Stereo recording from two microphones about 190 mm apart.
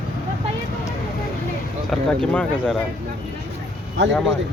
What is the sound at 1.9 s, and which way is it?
Speech, centre (ahead or behind).